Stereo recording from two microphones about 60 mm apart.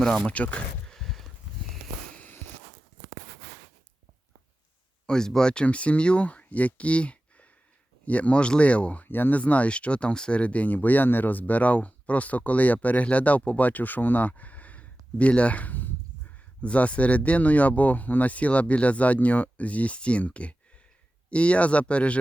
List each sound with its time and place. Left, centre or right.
0.0 s speech: centre
0.9 s a sound: centre
5.0 s speech: centre
9.0 s speech: left
9.4 s speech: left